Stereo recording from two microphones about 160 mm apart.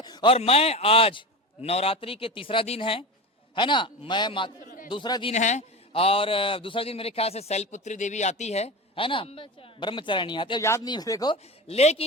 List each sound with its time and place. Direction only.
0.0 s a man's voice: 25° left (ahead or behind)
4.6 s a sound: 60° left (ahead or behind)
4.9 s speech: 30° left (ahead or behind)
5.3 s a man's voice: 45° left (ahead or behind); by 10.6 s 30° left (ahead or behind)
10.6 s speech: 15° left (ahead or behind)
11.7 s a man's voice: 40° left (ahead or behind)